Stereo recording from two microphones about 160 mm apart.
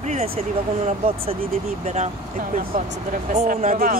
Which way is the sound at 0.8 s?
35° right (ahead or behind).